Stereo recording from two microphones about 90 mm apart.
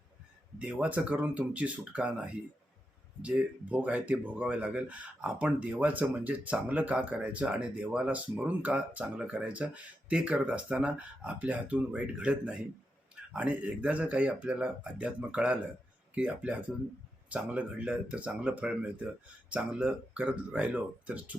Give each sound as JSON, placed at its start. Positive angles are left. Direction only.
{"t": 0.6, "sound": "speech", "side_deg": -15}